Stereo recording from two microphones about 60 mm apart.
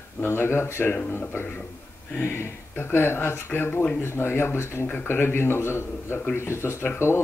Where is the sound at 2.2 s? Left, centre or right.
Left.